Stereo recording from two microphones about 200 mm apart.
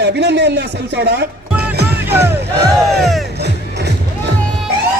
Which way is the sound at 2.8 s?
Centre (ahead or behind).